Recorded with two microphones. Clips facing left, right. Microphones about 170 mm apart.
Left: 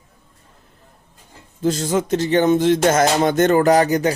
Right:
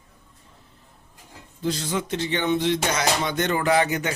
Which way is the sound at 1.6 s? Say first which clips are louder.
Left 7 dB; 45° left (ahead or behind).